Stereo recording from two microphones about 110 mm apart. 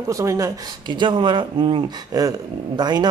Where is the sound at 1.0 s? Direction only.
45° right (ahead or behind).